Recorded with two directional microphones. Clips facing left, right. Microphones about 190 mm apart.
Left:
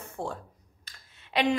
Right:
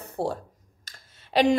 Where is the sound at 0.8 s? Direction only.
40° right (ahead or behind).